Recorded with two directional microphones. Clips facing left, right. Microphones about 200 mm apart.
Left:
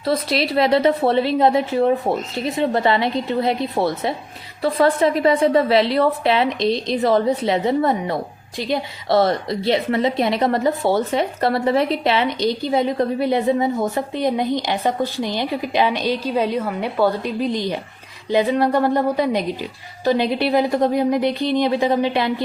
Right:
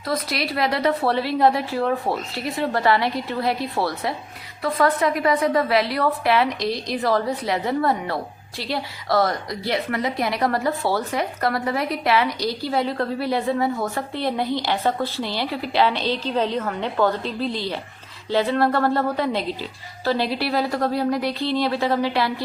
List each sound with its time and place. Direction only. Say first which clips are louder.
0.0 s a woman's voice: left 5 dB; 25° left (ahead or behind)